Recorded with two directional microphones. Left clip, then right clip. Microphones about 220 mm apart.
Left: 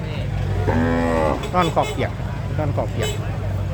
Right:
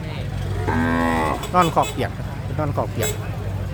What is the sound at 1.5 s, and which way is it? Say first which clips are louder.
Speech: right 3 dB; 20° right (ahead or behind).